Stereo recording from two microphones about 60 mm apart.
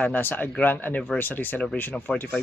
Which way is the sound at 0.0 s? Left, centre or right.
Left.